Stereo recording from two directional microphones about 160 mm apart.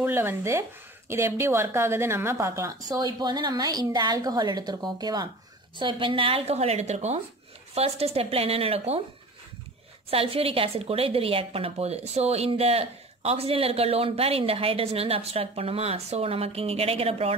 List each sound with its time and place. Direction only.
0.0 s a woman's voice: 15° right (ahead or behind); by 9.0 s 40° right (ahead or behind)
10.0 s a woman's voice: 35° right (ahead or behind)